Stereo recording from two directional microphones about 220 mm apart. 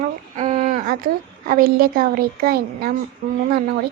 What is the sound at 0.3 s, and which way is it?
A woman's voice, 35° right (ahead or behind).